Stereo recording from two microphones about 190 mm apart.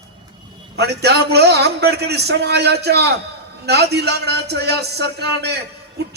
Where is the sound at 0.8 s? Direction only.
60° right (ahead or behind).